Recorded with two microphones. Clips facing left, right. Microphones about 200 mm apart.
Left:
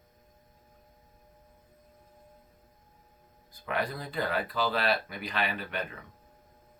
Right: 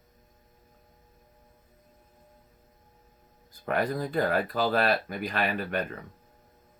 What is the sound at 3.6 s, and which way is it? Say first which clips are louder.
Speech: right 5 dB; 50° right (ahead or behind).